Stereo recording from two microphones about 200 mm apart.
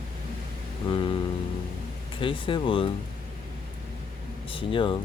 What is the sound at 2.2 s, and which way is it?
Speech, 25° left (ahead or behind).